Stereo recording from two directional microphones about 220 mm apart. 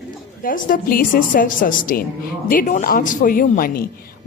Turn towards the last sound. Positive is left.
turn(degrees=40)  # may be behind; listen again after turning